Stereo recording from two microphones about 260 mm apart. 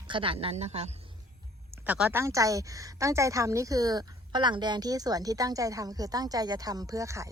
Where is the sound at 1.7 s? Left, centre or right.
Centre.